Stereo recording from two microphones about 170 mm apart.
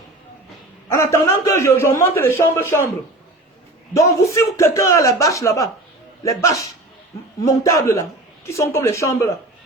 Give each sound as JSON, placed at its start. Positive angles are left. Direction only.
{"t": 0.9, "sound": "a man's voice", "side_deg": 15}
{"t": 3.9, "sound": "a man's voice", "side_deg": 20}